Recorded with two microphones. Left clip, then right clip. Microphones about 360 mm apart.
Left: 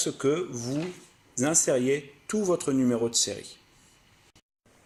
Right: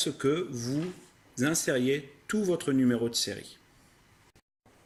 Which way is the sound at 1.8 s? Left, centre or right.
Centre.